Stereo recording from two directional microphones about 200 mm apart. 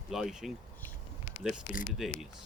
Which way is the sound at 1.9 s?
Centre (ahead or behind).